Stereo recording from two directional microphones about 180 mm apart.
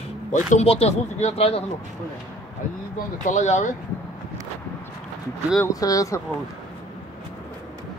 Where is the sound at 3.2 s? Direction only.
45° left (ahead or behind).